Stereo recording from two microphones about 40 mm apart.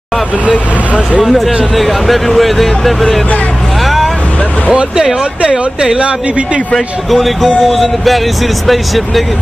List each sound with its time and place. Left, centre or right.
0.5 s speech: right
1.2 s speech: centre
3.8 s vehicle: centre
5.9 s speech: right
7.1 s speech: centre